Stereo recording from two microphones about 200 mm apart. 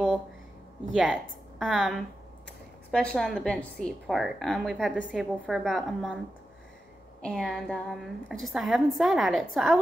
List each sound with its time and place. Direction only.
0.9 s a woman's voice: centre (ahead or behind)
7.2 s a woman's voice: 5° left (ahead or behind)